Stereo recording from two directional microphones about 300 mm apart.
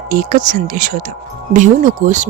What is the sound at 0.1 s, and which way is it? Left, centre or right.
Speech, right.